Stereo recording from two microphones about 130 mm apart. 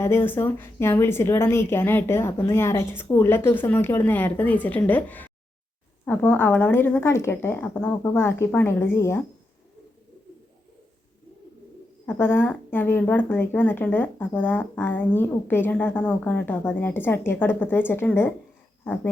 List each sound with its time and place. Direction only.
0.0 s speech: 20° left (ahead or behind)
12.0 s speech: 15° left (ahead or behind)